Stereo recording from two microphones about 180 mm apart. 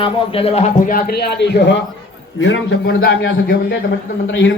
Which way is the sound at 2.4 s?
90° left.